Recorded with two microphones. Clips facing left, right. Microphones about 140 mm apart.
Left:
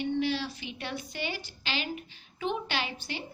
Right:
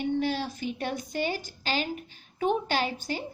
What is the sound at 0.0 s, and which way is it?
A woman's voice, 45° right (ahead or behind).